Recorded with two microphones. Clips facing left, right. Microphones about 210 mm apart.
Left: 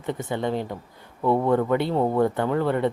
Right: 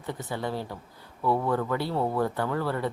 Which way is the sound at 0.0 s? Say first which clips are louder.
Left 6 dB; 20° left (ahead or behind).